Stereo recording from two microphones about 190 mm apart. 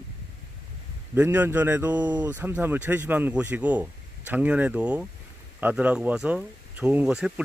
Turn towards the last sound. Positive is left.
turn(degrees=-5)  # may be behind; listen again after turning